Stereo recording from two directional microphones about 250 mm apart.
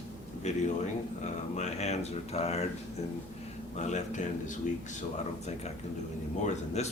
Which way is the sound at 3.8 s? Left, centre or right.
Left.